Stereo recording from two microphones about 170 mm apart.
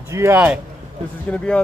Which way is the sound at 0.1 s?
15° right (ahead or behind).